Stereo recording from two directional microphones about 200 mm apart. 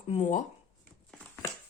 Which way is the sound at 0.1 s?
35° left (ahead or behind).